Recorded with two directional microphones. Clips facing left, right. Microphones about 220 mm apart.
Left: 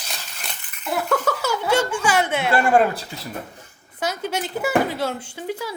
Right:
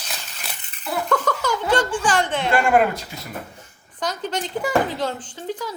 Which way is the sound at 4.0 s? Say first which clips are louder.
Left 1 dB; 10° left (ahead or behind).